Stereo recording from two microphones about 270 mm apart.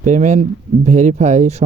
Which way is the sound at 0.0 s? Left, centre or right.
Right.